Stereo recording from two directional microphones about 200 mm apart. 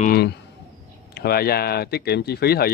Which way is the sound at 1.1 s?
50° left (ahead or behind).